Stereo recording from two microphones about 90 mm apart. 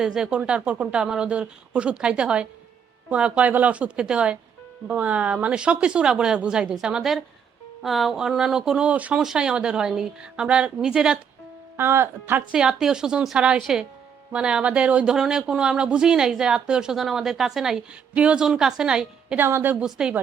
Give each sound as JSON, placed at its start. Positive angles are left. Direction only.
{"t": 0.0, "sound": "speech", "side_deg": -5}
{"t": 11.8, "sound": "speech", "side_deg": -25}
{"t": 12.5, "sound": "speech", "side_deg": -10}
{"t": 19.4, "sound": "speech", "side_deg": -25}
{"t": 19.7, "sound": "speech", "side_deg": -10}